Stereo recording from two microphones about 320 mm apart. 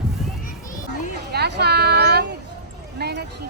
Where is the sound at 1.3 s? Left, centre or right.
Right.